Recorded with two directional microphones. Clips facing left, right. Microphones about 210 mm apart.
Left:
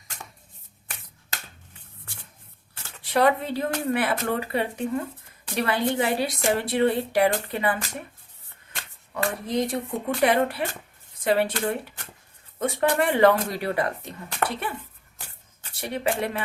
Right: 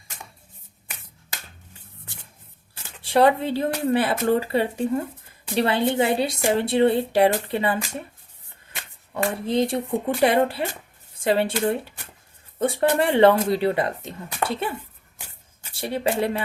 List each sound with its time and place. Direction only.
3.0 s a woman's voice: 30° right (ahead or behind)
9.1 s a woman's voice: 25° right (ahead or behind)
15.7 s speech: 30° right (ahead or behind)